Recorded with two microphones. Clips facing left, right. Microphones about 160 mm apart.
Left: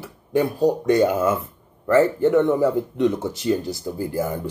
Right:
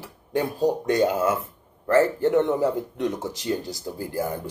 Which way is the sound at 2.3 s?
15° right (ahead or behind).